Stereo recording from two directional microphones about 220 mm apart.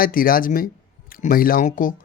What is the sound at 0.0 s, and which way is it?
Speech, 40° left (ahead or behind).